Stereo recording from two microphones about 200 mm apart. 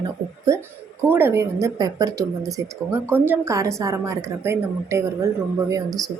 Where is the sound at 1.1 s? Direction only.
10° right (ahead or behind).